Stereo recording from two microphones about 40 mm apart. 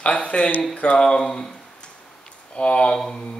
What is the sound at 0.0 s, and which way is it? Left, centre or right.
Speech, left.